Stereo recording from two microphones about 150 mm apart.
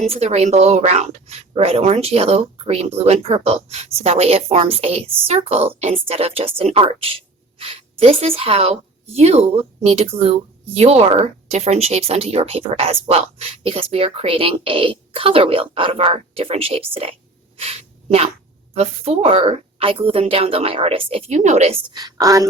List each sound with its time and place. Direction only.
0.0 s a woman's voice: 45° right (ahead or behind)
17.6 s a sound: 45° right (ahead or behind)
18.7 s speech: 40° right (ahead or behind)
21.9 s a woman's voice: 25° right (ahead or behind)